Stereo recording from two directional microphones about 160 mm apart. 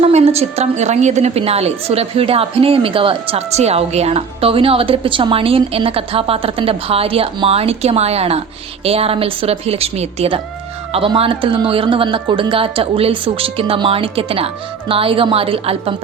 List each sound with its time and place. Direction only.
0.0 s a woman's voice: 40° right (ahead or behind)